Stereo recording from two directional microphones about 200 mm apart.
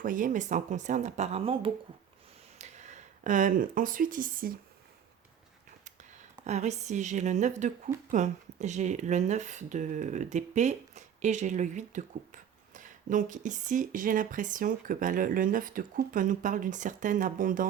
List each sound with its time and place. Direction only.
0.0 s speech: 45° right (ahead or behind)
6.4 s speech: 35° right (ahead or behind)